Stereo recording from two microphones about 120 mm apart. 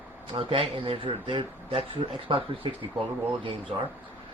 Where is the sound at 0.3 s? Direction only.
50° right (ahead or behind).